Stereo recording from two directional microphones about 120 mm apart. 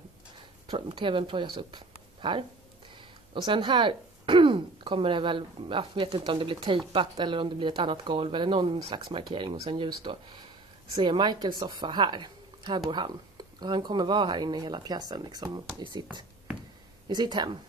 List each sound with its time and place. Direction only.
0.7 s a woman's voice: 45° right (ahead or behind)
3.4 s a woman's voice: 40° right (ahead or behind)